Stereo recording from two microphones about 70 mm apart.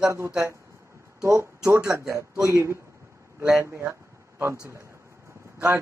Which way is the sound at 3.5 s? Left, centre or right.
Right.